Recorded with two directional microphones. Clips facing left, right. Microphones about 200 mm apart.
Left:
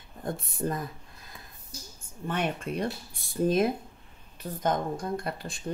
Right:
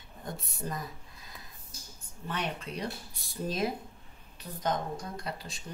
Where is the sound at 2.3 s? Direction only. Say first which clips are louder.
Left 5 dB; 50° left (ahead or behind).